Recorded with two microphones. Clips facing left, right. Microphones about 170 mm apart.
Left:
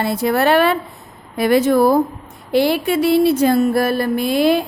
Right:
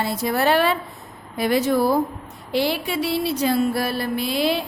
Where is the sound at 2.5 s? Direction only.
55° left (ahead or behind).